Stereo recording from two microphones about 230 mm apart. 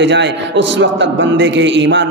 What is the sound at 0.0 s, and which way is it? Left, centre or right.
A man's voice, right.